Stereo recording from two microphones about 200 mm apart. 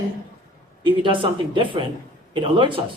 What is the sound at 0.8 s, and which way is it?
Speech, 25° right (ahead or behind).